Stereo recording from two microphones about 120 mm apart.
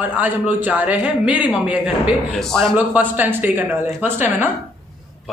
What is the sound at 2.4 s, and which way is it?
Speech, 5° left (ahead or behind).